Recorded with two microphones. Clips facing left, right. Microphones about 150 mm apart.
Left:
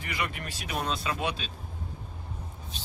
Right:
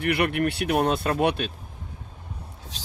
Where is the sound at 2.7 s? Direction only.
90° right.